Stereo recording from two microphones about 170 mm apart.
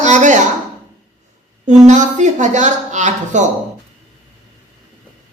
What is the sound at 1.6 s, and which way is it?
Speech, 45° right (ahead or behind).